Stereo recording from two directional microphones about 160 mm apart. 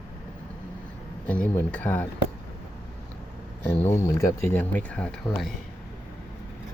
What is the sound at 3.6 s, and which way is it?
Speech, 15° left (ahead or behind).